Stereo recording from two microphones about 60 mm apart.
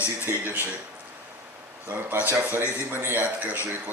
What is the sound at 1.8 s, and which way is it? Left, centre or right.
Speech, right.